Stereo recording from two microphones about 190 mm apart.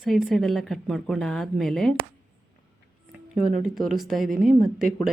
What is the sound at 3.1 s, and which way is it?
Speech, centre (ahead or behind).